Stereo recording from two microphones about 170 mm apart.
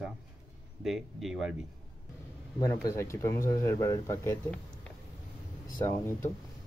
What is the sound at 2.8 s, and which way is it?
Speech, 15° left (ahead or behind).